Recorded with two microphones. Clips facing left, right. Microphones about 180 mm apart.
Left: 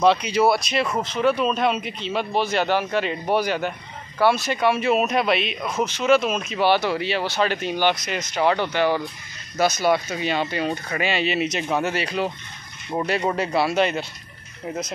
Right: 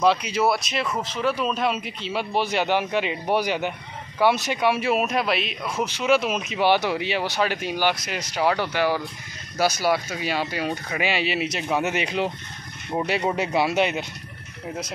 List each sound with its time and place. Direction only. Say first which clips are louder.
0.0 s a man's voice: left 3 dB; 5° right (ahead or behind)
5.9 s a man's voice: left 2 dB; 10° right (ahead or behind)
11.8 s a man's voice: even; 20° right (ahead or behind)